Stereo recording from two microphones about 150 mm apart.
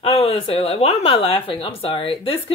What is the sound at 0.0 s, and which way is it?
Speech, 40° left (ahead or behind).